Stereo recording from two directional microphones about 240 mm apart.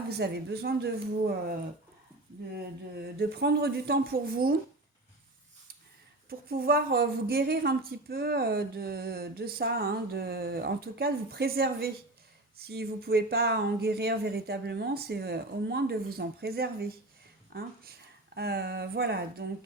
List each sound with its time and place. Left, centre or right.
0.1 s a woman's voice: right
3.2 s a woman's voice: right
6.2 s a woman's voice: right